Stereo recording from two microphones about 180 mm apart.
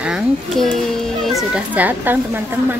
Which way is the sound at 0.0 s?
Centre (ahead or behind).